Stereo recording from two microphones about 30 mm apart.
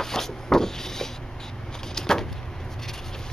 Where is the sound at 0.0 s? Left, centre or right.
Centre.